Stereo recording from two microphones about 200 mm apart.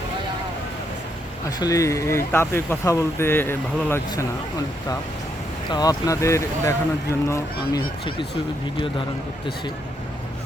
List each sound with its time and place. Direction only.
1.5 s speech: 20° left (ahead or behind)
5.7 s speech: 20° left (ahead or behind)